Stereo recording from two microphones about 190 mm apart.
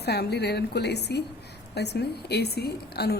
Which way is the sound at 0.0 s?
60° left (ahead or behind).